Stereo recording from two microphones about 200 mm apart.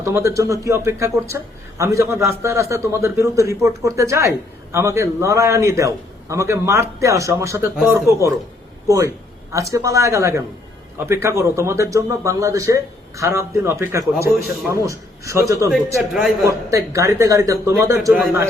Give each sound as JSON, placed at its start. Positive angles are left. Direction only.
{"t": 0.0, "sound": "a man's voice", "side_deg": -15}